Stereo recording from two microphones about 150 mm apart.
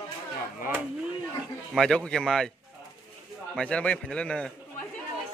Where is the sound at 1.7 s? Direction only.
5° left (ahead or behind).